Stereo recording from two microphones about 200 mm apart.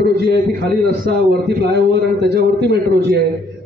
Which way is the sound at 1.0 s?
50° right (ahead or behind).